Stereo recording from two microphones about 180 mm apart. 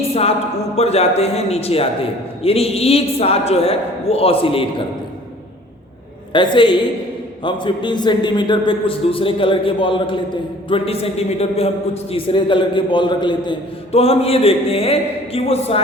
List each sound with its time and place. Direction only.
0.0 s a sound: 35° left (ahead or behind)
0.8 s a man's voice: 35° left (ahead or behind)
6.3 s a man's voice: 25° left (ahead or behind)